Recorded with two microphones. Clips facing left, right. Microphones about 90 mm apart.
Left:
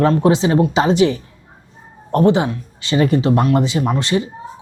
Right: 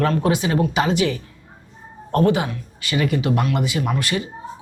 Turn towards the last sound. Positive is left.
turn(degrees=25)  # may be behind; listen again after turning